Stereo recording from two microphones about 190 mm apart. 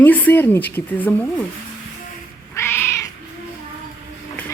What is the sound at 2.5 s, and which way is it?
Cat, 10° left (ahead or behind).